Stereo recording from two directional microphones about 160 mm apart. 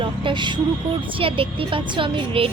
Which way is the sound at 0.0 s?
30° right (ahead or behind).